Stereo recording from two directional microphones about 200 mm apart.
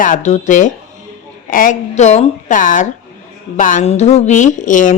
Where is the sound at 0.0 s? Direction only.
40° left (ahead or behind).